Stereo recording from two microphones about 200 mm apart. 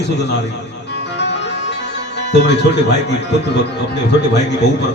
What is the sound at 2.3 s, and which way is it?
Speech, 60° left (ahead or behind).